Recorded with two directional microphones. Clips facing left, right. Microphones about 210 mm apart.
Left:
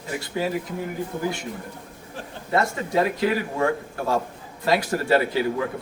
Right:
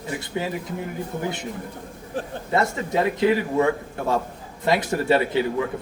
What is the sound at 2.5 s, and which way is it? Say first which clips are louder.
A man's voice: even; 25° right (ahead or behind).